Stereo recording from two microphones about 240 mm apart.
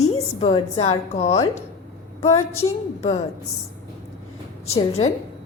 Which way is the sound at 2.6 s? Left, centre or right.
Left.